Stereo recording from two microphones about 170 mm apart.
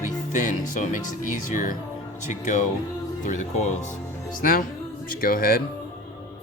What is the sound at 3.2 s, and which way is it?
Speech, 45° left (ahead or behind).